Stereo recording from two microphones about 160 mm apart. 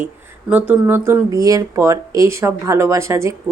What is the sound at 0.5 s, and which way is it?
A woman's voice, 10° right (ahead or behind).